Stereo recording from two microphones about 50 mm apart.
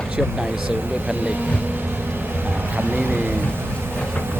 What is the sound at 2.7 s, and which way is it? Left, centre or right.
Speech, right.